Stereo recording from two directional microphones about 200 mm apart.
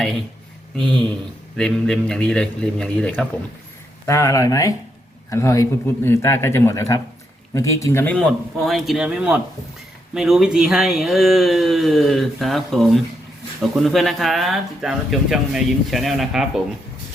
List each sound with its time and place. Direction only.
1.5 s speech: 5° left (ahead or behind)